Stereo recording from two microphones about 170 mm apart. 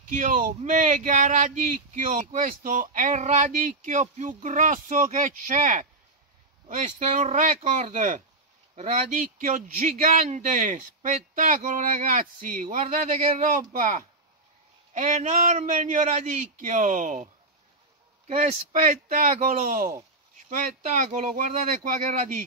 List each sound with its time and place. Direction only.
0.1 s speech: 50° right (ahead or behind)